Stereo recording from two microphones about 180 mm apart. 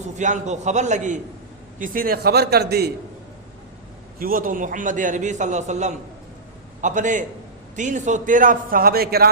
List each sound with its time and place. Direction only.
0.2 s a man's voice: 40° right (ahead or behind); by 2.9 s 65° right (ahead or behind)
4.2 s a man's voice: 50° right (ahead or behind)